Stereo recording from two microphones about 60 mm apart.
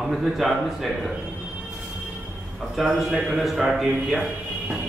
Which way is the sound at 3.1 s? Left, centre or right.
Right.